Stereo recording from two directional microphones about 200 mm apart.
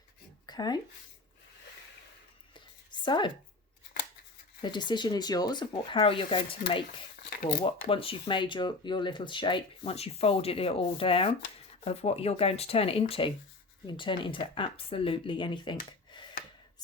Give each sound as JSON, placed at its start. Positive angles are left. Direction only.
{"t": 0.4, "sound": "a sound", "side_deg": 20}
{"t": 3.0, "sound": "speech", "side_deg": 25}
{"t": 4.6, "sound": "speech", "side_deg": 20}